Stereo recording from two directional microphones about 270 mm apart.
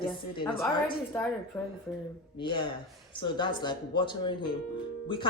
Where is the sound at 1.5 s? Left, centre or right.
Centre.